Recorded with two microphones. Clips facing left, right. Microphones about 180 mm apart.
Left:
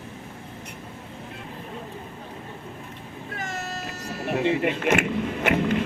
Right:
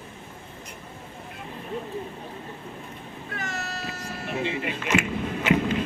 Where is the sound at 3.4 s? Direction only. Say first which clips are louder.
Left 1 dB; 45° left (ahead or behind).